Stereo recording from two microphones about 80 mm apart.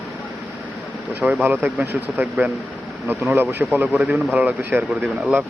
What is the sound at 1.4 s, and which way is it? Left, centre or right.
Speech, right.